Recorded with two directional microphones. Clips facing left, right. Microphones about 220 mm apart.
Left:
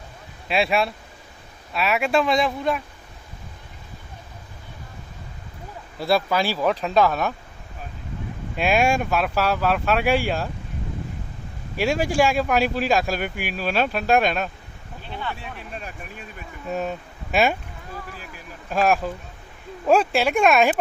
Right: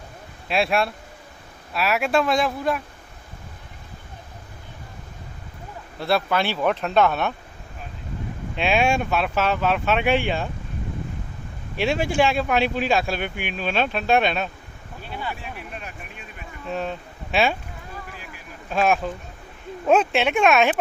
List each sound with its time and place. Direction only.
0.4 s speech: centre (ahead or behind)
6.0 s speech: 10° left (ahead or behind)
8.5 s speech: 5° left (ahead or behind)
12.1 s speech: centre (ahead or behind)
15.1 s speech: 10° right (ahead or behind)
15.4 s speech: 35° left (ahead or behind)
16.6 s speech: 5° left (ahead or behind)
18.7 s speech: 5° left (ahead or behind)